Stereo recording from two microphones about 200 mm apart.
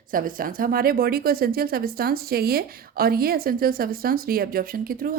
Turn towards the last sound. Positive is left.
turn(degrees=-45)  # may be behind; listen again after turning